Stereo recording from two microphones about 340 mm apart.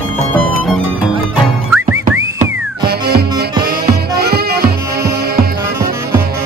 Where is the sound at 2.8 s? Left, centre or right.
Right.